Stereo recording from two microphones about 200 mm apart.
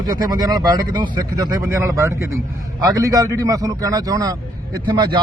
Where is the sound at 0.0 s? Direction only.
20° right (ahead or behind).